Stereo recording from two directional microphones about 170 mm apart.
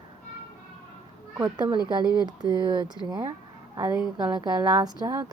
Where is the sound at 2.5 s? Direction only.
25° right (ahead or behind).